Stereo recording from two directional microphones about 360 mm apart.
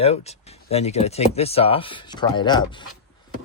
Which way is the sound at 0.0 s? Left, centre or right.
Centre.